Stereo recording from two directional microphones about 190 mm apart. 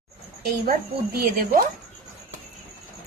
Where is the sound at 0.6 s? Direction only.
50° right (ahead or behind).